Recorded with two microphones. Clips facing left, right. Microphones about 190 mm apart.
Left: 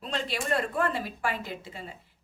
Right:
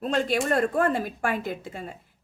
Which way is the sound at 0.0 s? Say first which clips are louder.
Right 8 dB; 50° right (ahead or behind).